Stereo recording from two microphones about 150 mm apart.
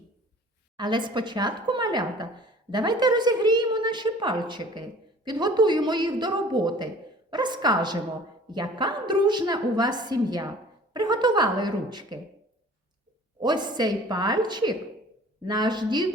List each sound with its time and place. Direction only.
0.8 s a woman's voice: 30° right (ahead or behind)
13.4 s a woman's voice: 30° right (ahead or behind)